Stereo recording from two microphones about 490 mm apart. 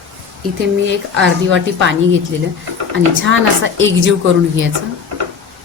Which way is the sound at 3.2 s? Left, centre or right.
Right.